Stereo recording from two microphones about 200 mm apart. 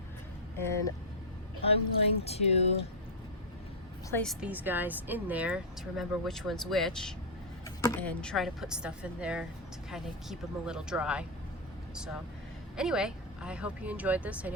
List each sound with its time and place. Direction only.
1.6 s speech: 30° left (ahead or behind)
4.1 s speech: 5° left (ahead or behind)
7.8 s speech: 10° left (ahead or behind); by 11.3 s 5° right (ahead or behind)
12.7 s speech: 5° right (ahead or behind)